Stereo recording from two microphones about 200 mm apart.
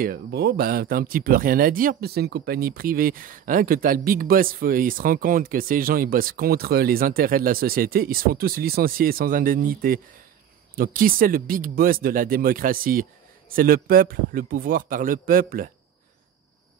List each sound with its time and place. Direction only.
0.0 s speech: 50° right (ahead or behind)